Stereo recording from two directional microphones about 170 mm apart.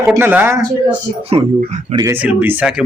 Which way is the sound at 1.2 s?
40° right (ahead or behind).